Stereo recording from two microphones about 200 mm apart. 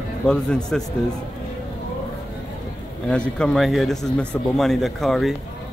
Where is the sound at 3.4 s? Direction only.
Centre (ahead or behind).